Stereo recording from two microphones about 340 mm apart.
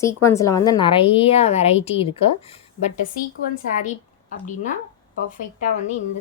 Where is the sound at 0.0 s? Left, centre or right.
Centre.